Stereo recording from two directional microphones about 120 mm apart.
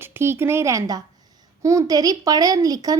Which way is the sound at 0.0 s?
20° right (ahead or behind).